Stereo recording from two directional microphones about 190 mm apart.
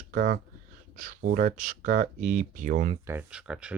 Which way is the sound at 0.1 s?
45° right (ahead or behind).